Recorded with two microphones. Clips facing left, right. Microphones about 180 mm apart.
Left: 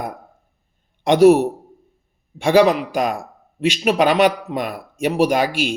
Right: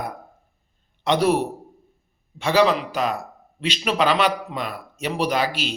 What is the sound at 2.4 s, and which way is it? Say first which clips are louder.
A man's voice: left 5 dB; 50° left (ahead or behind).